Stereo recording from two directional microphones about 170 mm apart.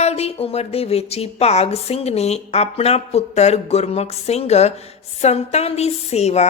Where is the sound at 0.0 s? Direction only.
40° left (ahead or behind).